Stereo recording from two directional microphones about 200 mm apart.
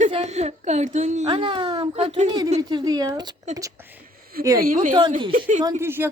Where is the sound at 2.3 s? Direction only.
20° right (ahead or behind).